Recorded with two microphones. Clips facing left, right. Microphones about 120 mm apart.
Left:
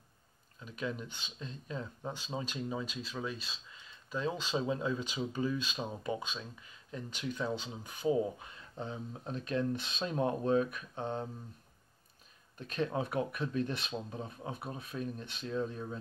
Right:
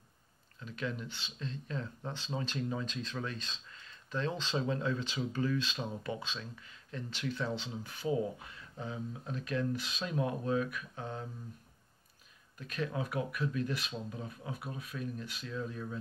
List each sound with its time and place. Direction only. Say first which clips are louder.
0.6 s speech: even; 15° left (ahead or behind)
12.5 s speech: left 3 dB; 25° left (ahead or behind)